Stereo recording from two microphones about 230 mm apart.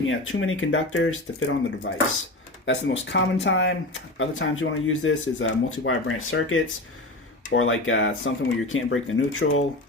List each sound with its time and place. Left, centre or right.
0.0 s speech: left